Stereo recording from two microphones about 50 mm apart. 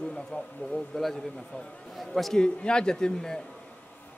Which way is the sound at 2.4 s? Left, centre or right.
Centre.